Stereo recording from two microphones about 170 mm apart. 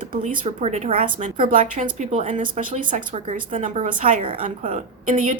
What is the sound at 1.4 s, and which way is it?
A woman's voice, 50° right (ahead or behind).